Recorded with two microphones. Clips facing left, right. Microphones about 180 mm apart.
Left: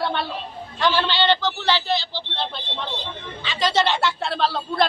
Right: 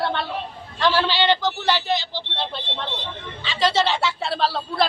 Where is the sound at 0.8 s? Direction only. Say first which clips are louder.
Right 1 dB; 5° right (ahead or behind).